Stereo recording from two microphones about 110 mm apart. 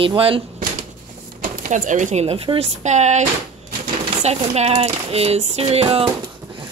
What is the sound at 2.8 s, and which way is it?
Speech, 90° right.